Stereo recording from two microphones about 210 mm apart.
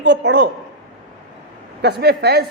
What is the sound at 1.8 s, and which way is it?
Speech, 50° right (ahead or behind).